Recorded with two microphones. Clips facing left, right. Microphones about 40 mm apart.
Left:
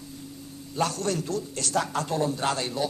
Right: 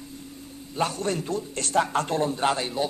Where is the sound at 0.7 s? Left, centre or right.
Right.